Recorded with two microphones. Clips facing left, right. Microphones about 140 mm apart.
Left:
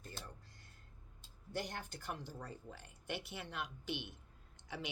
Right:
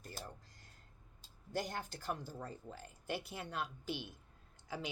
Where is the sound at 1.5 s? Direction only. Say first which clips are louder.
Right 3 dB; 40° right (ahead or behind).